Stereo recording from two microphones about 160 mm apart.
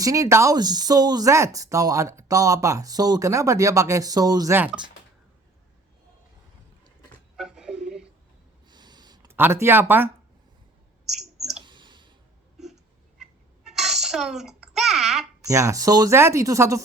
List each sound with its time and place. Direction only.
0.0 s speech: 20° right (ahead or behind)
4.5 s speech: 10° right (ahead or behind)
7.3 s a sound: 5° right (ahead or behind)
8.7 s a sound: 25° right (ahead or behind)
9.3 s speech: 15° right (ahead or behind)
11.1 s clicking: centre (ahead or behind)
11.6 s clicking: 30° right (ahead or behind)
12.5 s a sound: 5° right (ahead or behind)
15.4 s speech: 20° right (ahead or behind)